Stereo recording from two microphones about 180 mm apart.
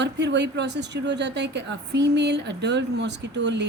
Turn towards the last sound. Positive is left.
turn(degrees=-75)  # may be behind; listen again after turning